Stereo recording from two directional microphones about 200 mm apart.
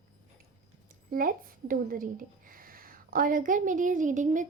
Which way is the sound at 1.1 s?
45° right (ahead or behind).